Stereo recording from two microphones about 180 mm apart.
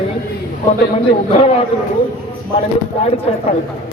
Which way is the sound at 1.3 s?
35° left (ahead or behind).